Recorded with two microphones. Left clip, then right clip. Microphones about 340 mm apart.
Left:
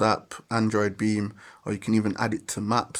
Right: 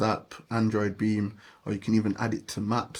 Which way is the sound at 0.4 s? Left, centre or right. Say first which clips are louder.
Left 3 dB; left.